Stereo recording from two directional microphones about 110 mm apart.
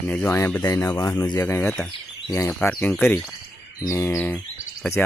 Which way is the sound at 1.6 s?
5° left (ahead or behind).